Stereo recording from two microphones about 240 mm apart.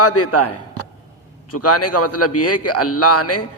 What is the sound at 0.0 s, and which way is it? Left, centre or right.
A man's voice, left.